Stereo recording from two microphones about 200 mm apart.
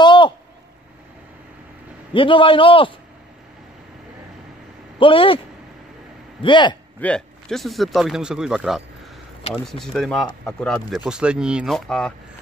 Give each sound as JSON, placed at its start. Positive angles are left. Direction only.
{"t": 0.0, "sound": "a sound", "side_deg": 25}
{"t": 2.1, "sound": "a man's voice", "side_deg": 25}
{"t": 4.9, "sound": "a man's voice", "side_deg": 25}
{"t": 6.4, "sound": "a man's voice", "side_deg": 25}
{"t": 7.0, "sound": "speech", "side_deg": 5}